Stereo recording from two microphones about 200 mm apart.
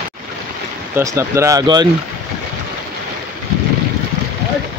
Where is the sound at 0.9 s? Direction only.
15° right (ahead or behind).